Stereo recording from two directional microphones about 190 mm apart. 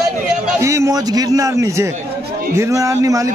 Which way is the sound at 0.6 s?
15° right (ahead or behind).